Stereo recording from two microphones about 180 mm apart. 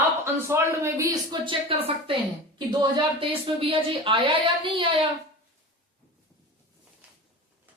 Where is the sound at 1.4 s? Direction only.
30° right (ahead or behind).